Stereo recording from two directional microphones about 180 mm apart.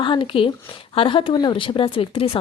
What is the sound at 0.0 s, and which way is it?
A woman's voice, 25° left (ahead or behind).